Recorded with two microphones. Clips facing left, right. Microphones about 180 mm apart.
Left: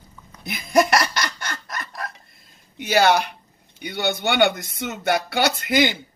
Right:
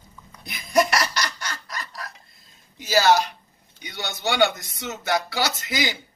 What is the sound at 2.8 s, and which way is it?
Speech, 60° left (ahead or behind).